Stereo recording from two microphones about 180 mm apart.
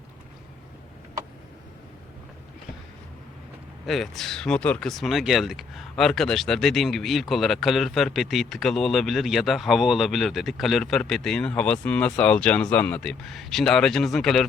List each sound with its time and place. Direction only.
3.8 s speech: centre (ahead or behind)